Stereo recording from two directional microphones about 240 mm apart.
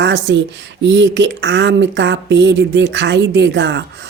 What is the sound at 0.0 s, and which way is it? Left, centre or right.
A woman's voice, right.